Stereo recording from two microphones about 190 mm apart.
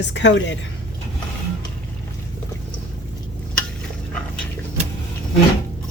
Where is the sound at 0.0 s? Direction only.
70° left (ahead or behind).